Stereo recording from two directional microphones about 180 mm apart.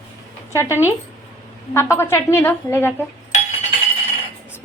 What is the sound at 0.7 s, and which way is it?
Speech, 10° right (ahead or behind).